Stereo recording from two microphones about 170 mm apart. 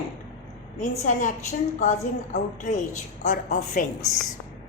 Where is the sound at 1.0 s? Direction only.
45° left (ahead or behind).